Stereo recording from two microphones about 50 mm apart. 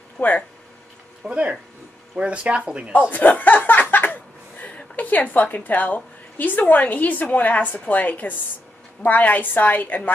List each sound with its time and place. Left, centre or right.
0.2 s speech: left
1.2 s speech: right
2.9 s a woman's voice: left